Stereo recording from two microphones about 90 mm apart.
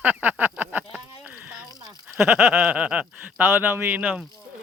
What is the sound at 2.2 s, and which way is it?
Speech, 25° right (ahead or behind).